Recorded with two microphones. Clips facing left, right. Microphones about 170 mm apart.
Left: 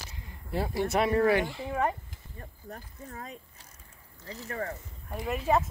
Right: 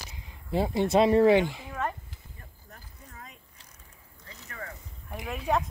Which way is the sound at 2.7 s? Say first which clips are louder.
Left 8 dB; 40° left (ahead or behind).